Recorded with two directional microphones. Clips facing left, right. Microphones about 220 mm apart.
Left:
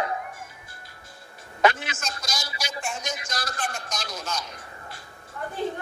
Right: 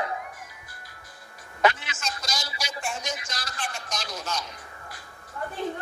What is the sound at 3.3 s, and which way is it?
Speech, 50° left (ahead or behind).